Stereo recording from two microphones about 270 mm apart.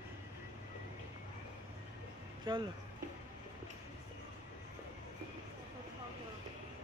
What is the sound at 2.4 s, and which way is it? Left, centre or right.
Speech, centre.